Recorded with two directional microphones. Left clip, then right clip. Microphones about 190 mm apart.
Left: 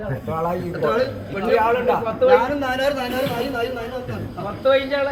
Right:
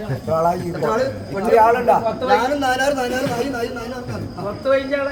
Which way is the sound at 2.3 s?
5° right (ahead or behind).